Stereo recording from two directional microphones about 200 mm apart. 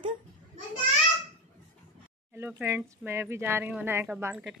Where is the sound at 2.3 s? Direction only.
10° right (ahead or behind).